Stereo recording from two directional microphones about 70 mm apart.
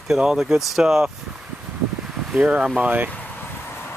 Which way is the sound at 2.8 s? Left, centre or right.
Right.